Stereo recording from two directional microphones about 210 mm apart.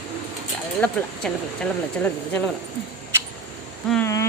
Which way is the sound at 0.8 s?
5° left (ahead or behind).